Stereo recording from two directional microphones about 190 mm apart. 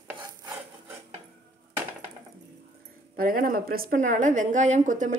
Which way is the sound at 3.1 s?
50° right (ahead or behind).